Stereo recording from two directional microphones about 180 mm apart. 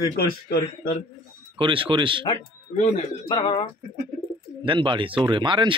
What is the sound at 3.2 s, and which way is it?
Speech, 25° left (ahead or behind).